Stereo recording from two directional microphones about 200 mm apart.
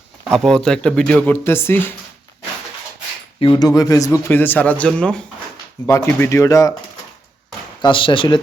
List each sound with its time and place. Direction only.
0.3 s speech: centre (ahead or behind)
3.4 s a man's voice: 20° left (ahead or behind)
7.8 s speech: 25° left (ahead or behind)